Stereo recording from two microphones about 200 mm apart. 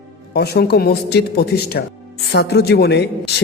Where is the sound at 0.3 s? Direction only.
55° left (ahead or behind).